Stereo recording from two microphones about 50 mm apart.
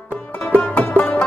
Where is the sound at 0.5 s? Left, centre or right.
Left.